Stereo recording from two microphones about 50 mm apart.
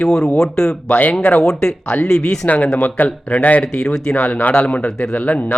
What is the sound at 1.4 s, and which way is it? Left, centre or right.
Speech, centre.